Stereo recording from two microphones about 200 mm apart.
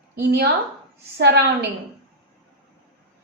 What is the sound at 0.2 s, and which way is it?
Speech, 55° right (ahead or behind).